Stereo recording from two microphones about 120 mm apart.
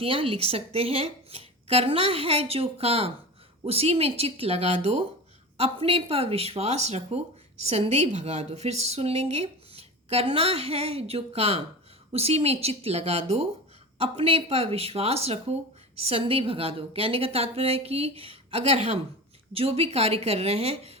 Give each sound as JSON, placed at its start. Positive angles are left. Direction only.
{"t": 0.0, "sound": "a woman's voice", "side_deg": -50}